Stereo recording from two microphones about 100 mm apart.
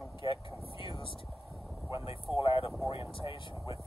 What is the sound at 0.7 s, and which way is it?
Vehicle, 60° left (ahead or behind).